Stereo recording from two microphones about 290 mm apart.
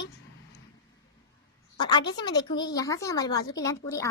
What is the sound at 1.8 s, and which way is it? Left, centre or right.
A woman's voice, centre.